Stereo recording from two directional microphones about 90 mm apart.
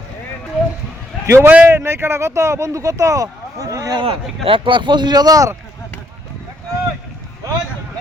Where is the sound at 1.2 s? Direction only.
30° right (ahead or behind).